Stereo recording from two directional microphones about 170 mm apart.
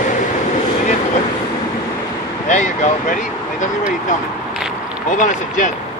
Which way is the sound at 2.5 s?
45° left (ahead or behind).